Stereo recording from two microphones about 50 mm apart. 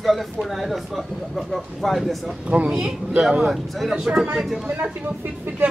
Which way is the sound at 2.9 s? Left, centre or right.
Centre.